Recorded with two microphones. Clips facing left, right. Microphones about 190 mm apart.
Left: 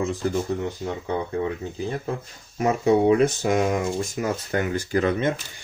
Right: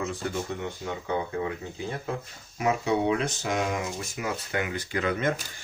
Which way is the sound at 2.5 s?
45° left (ahead or behind).